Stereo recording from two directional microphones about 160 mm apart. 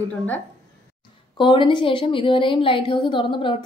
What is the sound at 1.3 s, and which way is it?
A woman's voice, 30° left (ahead or behind).